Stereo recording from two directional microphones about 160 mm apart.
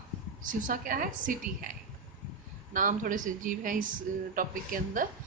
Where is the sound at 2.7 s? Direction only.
55° right (ahead or behind).